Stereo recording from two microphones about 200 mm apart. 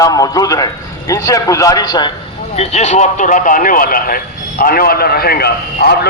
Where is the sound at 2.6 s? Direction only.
35° left (ahead or behind); by 6.1 s 55° left (ahead or behind).